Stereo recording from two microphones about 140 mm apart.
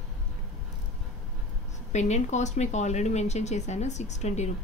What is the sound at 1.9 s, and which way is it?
A woman's voice, 55° left (ahead or behind).